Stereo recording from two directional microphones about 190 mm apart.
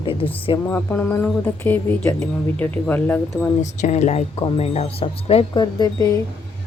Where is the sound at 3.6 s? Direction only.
40° left (ahead or behind); by 6.2 s 20° left (ahead or behind).